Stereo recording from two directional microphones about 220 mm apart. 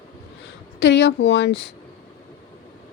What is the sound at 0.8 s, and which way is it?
Speech, 50° left (ahead or behind).